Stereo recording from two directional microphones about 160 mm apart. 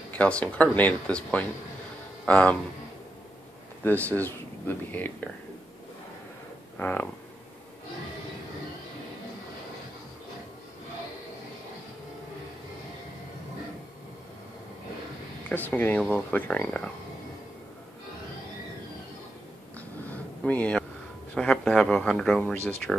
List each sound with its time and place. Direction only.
0.1 s speech: 10° left (ahead or behind)
3.8 s speech: 10° left (ahead or behind)
6.8 s speech: 10° left (ahead or behind)
15.5 s speech: 10° left (ahead or behind)
20.0 s a sound: 10° left (ahead or behind)
21.4 s speech: 5° left (ahead or behind)